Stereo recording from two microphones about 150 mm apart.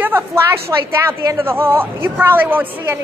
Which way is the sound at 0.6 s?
15° right (ahead or behind).